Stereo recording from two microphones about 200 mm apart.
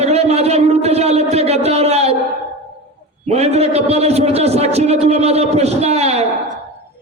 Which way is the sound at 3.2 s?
30° right (ahead or behind).